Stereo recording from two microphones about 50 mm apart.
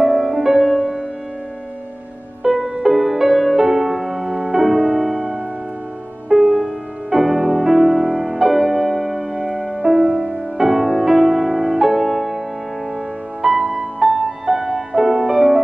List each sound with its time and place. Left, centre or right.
0.0 s music: centre
2.4 s music: centre
4.4 s music: centre
4.6 s music: centre
5.1 s music: centre
6.3 s music: centre
9.3 s music: centre
13.4 s music: centre